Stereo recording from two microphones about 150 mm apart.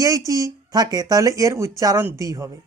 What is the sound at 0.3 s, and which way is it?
Speech, 20° right (ahead or behind).